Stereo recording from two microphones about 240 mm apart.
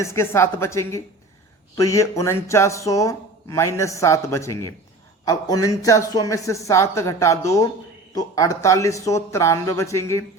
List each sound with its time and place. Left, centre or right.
0.0 s speech: centre